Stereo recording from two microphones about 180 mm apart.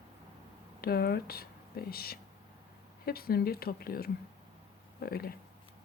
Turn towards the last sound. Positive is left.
turn(degrees=60)  # may be behind; listen again after turning